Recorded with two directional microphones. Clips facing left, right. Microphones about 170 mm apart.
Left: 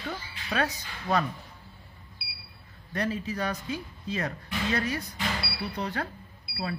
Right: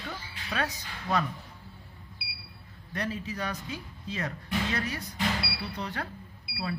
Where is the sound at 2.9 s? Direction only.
40° left (ahead or behind).